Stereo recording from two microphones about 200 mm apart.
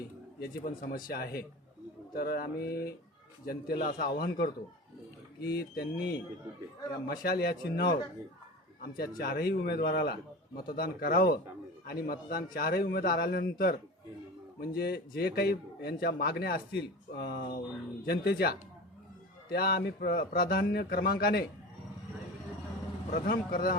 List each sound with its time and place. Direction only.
0.3 s a man's voice: 50° left (ahead or behind)
23.1 s a man's voice: 45° left (ahead or behind)